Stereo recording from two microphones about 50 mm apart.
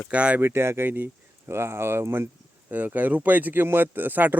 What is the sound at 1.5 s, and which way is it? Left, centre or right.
Speech, right.